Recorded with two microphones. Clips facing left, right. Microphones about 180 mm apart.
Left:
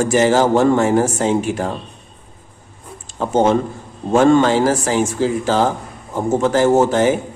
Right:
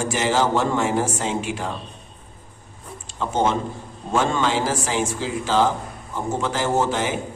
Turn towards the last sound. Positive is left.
turn(degrees=45)  # may be behind; listen again after turning